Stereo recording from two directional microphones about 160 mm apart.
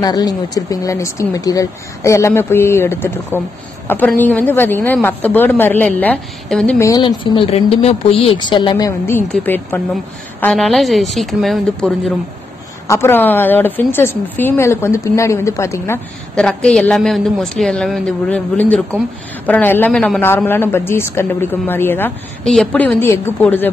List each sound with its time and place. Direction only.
0.0 s a woman's voice: 25° left (ahead or behind); by 6.8 s 5° left (ahead or behind)
6.8 s speech: 20° left (ahead or behind)
7.5 s a woman's voice: 40° left (ahead or behind); by 11.9 s centre (ahead or behind)
12.8 s a woman's voice: 15° left (ahead or behind)
16.3 s a woman's voice: 5° left (ahead or behind)